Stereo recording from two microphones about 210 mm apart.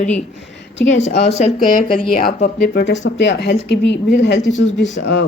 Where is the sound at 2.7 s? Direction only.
60° left (ahead or behind).